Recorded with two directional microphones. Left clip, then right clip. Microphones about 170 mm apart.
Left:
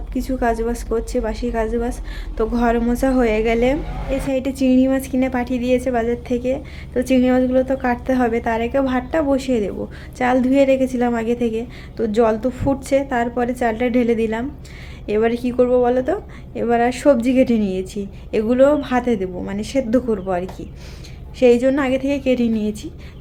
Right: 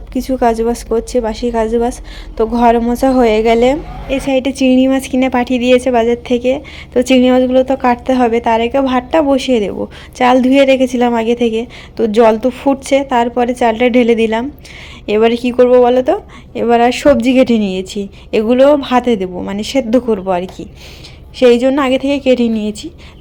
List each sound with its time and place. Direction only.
0.1 s a woman's voice: 30° right (ahead or behind)